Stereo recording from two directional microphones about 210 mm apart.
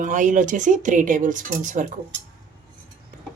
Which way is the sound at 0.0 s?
35° right (ahead or behind).